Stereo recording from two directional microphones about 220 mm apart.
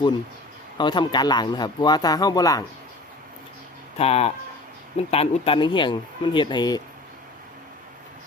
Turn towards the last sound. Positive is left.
turn(degrees=20)  # may be behind; listen again after turning